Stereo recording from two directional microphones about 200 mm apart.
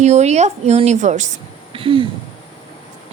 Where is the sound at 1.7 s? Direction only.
25° right (ahead or behind).